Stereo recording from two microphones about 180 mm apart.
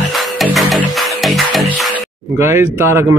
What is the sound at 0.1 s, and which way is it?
Music, centre (ahead or behind).